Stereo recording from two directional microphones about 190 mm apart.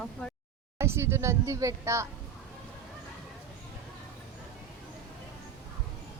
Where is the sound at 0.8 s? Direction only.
15° right (ahead or behind).